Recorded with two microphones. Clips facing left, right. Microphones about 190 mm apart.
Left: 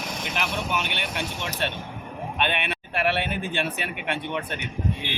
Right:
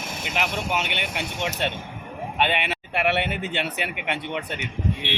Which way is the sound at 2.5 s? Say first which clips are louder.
Right 2 dB; 70° right (ahead or behind).